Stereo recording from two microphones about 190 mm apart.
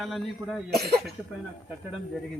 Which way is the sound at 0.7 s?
55° right (ahead or behind).